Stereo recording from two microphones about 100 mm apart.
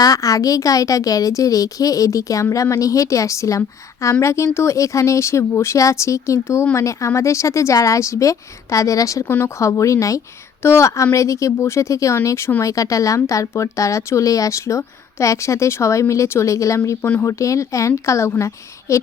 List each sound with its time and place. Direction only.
0.0 s a woman's voice: 35° left (ahead or behind)